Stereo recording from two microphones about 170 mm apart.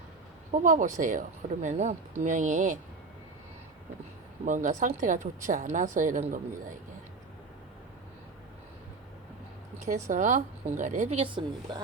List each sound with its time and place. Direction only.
0.6 s a woman's voice: 50° right (ahead or behind)
4.4 s a woman's voice: 50° right (ahead or behind)
9.7 s a woman's voice: 45° right (ahead or behind)